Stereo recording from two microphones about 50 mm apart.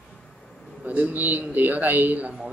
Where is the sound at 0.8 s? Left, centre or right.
Right.